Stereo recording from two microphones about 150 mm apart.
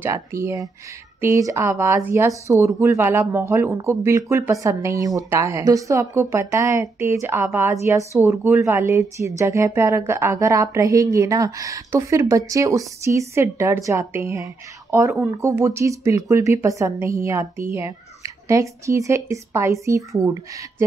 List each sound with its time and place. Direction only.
0.0 s a woman's voice: 20° right (ahead or behind)